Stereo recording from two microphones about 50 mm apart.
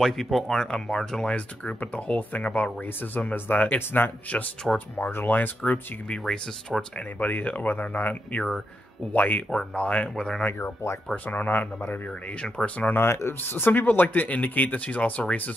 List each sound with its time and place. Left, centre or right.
0.0 s speech: centre
1.3 s speech: left
5.7 s speech: centre
6.2 s speech: centre
7.2 s speech: left
9.8 s speech: left
11.2 s speech: left
12.4 s speech: left
12.9 s speech: left
13.4 s speech: left